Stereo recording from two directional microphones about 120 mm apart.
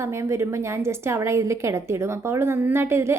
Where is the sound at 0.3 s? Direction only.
25° right (ahead or behind).